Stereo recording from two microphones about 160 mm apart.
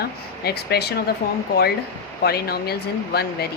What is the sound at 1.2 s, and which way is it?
Speech, 75° left (ahead or behind).